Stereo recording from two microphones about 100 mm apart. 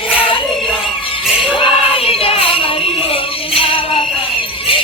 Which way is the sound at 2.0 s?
70° left (ahead or behind).